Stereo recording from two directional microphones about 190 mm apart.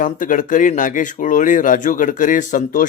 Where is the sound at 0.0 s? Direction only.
45° left (ahead or behind).